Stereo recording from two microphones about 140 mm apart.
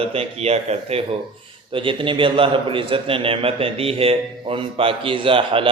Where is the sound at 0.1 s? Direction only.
45° right (ahead or behind).